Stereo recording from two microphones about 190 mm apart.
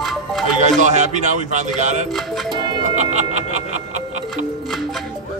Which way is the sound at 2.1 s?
Centre (ahead or behind).